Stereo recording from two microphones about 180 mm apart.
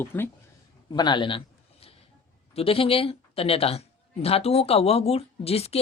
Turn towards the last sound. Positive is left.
turn(degrees=35)  # may be behind; listen again after turning